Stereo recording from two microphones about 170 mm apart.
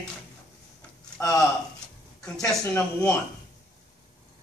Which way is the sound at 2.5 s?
5° left (ahead or behind).